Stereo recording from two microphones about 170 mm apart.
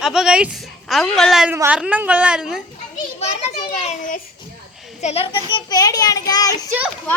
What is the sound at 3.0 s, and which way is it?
Children playing, 40° left (ahead or behind).